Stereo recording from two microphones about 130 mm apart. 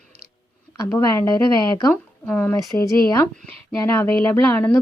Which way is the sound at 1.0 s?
25° left (ahead or behind).